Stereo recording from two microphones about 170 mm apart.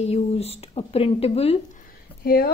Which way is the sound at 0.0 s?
35° left (ahead or behind).